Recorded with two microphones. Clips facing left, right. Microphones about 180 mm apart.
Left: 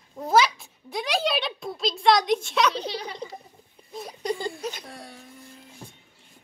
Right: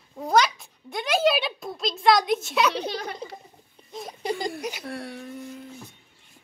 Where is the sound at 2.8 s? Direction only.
50° right (ahead or behind).